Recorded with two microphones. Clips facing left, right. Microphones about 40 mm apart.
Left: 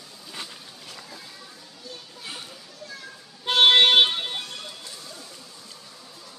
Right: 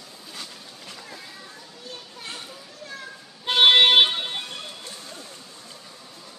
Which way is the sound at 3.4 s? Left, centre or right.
Centre.